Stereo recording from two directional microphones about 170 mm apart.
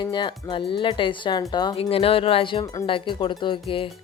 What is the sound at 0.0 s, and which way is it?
Speech, 25° left (ahead or behind).